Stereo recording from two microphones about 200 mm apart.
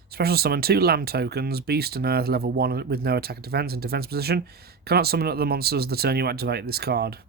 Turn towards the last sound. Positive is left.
turn(degrees=-55)  # may be behind; listen again after turning